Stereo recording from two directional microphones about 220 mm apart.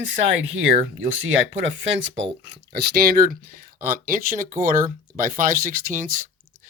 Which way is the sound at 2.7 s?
45° right (ahead or behind).